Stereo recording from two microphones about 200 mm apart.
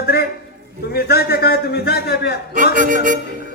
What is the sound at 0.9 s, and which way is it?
Speech, 50° left (ahead or behind).